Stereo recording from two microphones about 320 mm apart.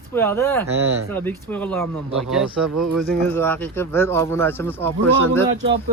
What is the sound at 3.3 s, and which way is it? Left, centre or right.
Speech, centre.